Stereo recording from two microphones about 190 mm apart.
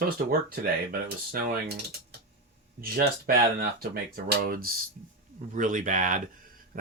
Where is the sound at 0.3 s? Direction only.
50° right (ahead or behind).